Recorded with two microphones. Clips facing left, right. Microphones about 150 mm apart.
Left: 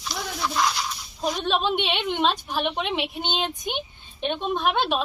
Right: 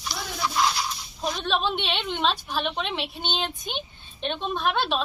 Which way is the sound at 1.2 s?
15° left (ahead or behind).